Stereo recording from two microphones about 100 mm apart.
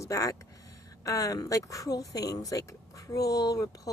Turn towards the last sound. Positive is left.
turn(degrees=35)  # may be behind; listen again after turning